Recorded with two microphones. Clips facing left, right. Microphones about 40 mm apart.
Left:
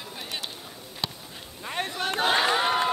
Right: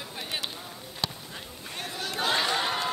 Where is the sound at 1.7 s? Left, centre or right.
Left.